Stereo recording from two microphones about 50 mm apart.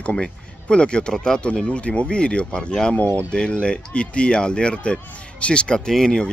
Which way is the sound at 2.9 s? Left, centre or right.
Left.